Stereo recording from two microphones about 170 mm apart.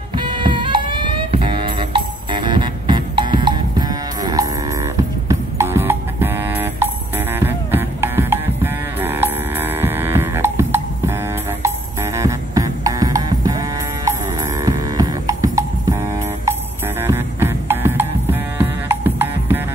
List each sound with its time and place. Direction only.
0.1 s music: 25° right (ahead or behind)
17.0 s music: 15° right (ahead or behind)